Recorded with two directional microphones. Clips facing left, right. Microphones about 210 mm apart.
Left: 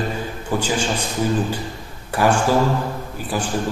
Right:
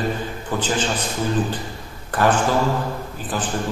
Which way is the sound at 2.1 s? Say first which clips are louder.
Left 1 dB; 10° left (ahead or behind).